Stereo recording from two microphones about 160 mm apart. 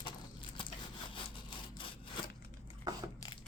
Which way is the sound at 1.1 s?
30° left (ahead or behind).